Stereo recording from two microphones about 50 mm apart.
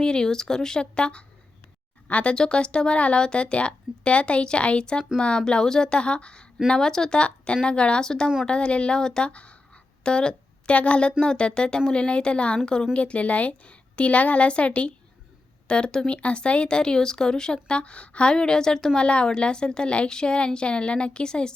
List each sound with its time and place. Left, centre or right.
0.0 s speech: centre
2.3 s a woman's voice: centre